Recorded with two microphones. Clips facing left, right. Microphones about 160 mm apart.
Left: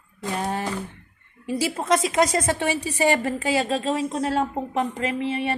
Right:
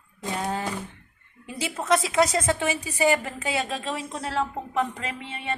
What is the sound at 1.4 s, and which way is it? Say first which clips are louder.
A woman's voice: left 4 dB; 30° left (ahead or behind).